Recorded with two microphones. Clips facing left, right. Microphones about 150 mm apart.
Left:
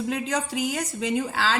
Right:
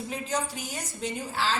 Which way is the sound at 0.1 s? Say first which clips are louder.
Left 4 dB; 90° left.